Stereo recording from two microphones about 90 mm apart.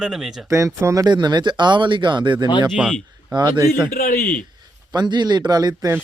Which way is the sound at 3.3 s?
55° right (ahead or behind).